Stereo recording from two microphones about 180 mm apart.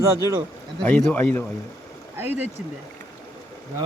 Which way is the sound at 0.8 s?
5° left (ahead or behind).